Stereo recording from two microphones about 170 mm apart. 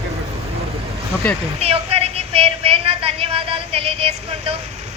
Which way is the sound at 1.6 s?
35° right (ahead or behind).